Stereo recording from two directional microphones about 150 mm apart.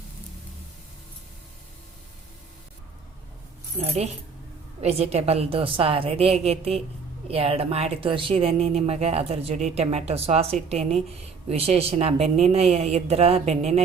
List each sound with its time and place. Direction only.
3.8 s a woman's voice: 45° right (ahead or behind)